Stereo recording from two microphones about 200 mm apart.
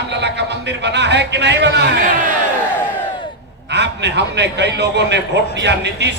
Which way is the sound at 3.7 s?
60° right (ahead or behind).